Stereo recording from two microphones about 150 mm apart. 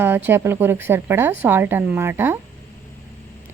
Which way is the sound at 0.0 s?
15° right (ahead or behind).